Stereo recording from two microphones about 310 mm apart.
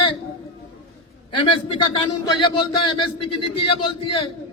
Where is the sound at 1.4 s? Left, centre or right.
Centre.